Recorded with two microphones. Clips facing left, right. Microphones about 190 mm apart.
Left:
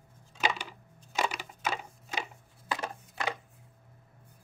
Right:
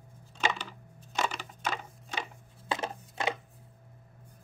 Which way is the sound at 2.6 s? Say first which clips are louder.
Right 2 dB; 25° right (ahead or behind).